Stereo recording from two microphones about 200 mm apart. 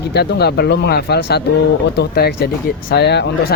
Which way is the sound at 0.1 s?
55° left (ahead or behind).